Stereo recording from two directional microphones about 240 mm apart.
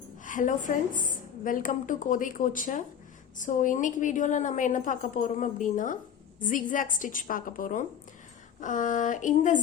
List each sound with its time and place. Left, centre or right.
0.3 s a woman's voice: left